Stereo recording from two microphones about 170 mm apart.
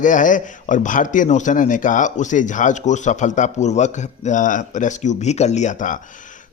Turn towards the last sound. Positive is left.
turn(degrees=50)  # may be behind; listen again after turning